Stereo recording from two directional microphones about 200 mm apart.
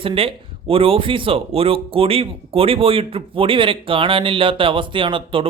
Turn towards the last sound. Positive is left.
turn(degrees=-25)  # may be behind; listen again after turning